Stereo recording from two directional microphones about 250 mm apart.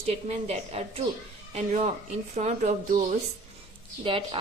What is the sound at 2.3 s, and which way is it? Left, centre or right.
A woman's voice, right.